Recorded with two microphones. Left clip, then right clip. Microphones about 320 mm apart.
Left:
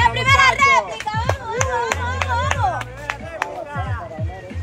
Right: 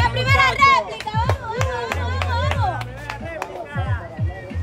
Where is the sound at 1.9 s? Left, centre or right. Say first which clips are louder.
Left 3 dB; left.